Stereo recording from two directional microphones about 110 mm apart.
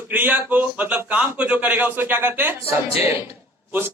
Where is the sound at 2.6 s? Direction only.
60° left (ahead or behind).